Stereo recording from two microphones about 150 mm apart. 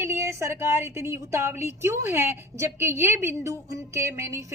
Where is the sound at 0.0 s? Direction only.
15° right (ahead or behind).